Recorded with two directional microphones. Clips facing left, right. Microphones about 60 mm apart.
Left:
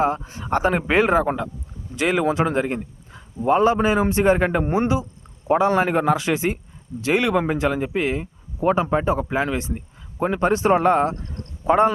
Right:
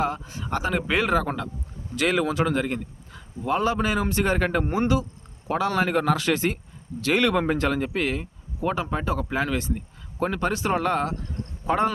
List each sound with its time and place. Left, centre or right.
0.0 s speech: left
8.6 s speech: left